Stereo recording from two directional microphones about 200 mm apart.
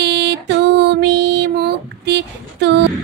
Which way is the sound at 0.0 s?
60° right (ahead or behind).